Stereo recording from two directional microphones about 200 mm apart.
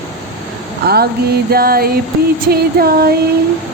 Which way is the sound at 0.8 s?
50° right (ahead or behind).